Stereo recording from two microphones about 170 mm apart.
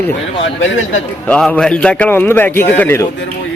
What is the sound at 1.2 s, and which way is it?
Speech, 5° left (ahead or behind).